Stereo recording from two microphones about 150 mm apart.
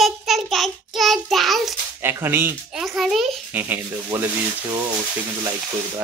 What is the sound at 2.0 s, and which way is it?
Speech, 15° right (ahead or behind).